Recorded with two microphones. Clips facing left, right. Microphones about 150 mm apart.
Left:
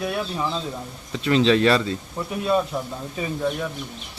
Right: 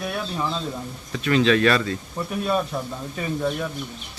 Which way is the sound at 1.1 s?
25° left (ahead or behind).